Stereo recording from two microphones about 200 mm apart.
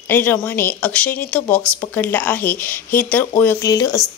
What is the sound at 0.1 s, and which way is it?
Speech, 10° left (ahead or behind).